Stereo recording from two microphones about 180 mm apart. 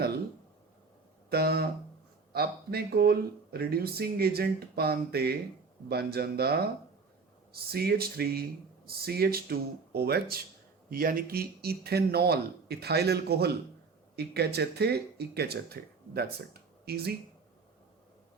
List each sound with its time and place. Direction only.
1.3 s speech: 60° right (ahead or behind)